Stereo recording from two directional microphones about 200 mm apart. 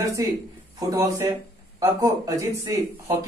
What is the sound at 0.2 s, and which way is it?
Speech, 15° right (ahead or behind).